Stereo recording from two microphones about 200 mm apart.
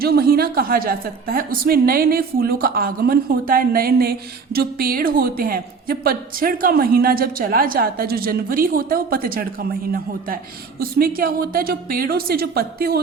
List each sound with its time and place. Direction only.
0.0 s a woman's voice: 50° right (ahead or behind)